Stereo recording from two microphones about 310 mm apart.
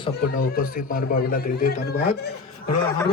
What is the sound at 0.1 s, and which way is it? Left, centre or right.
A man's voice, left.